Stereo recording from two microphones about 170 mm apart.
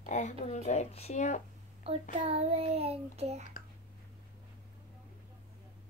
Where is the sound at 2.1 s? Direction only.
35° right (ahead or behind).